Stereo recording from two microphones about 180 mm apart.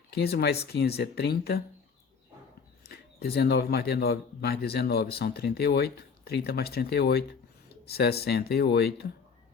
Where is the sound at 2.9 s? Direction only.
60° left (ahead or behind).